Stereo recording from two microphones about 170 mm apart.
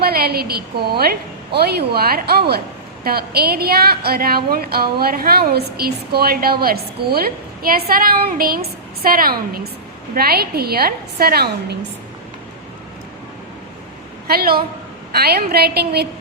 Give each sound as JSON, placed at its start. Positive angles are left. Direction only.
{"t": 0.0, "sound": "a woman's voice", "side_deg": -65}
{"t": 14.3, "sound": "a woman's voice", "side_deg": -60}